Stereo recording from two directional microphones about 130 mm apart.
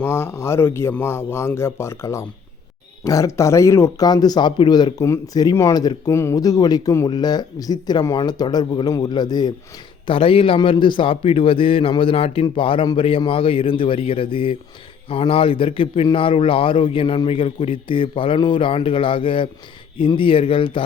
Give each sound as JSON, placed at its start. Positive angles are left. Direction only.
{"t": 0.0, "sound": "a man's voice", "side_deg": 20}
{"t": 10.1, "sound": "a man's voice", "side_deg": 45}